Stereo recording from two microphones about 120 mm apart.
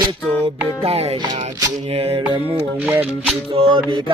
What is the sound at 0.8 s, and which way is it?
Music, 55° right (ahead or behind).